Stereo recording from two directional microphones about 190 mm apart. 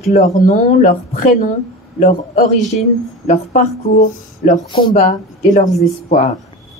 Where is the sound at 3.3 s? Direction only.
40° left (ahead or behind).